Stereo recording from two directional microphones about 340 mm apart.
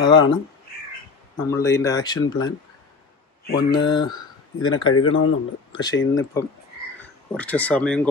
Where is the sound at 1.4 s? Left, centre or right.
Centre.